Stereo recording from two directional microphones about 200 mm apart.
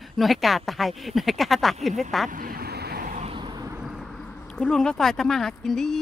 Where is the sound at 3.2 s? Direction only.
25° right (ahead or behind).